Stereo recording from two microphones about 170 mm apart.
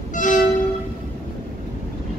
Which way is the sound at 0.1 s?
50° left (ahead or behind).